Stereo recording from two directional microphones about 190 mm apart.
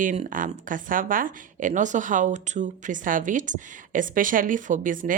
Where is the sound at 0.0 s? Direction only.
40° right (ahead or behind).